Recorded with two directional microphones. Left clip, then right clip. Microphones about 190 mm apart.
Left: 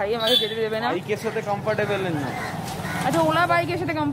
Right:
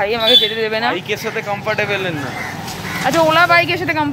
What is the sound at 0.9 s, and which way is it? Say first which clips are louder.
Speech: right 5 dB; 25° left (ahead or behind).